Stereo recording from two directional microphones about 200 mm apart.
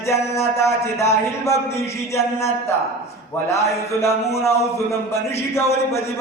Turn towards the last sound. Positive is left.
turn(degrees=15)  # may be behind; listen again after turning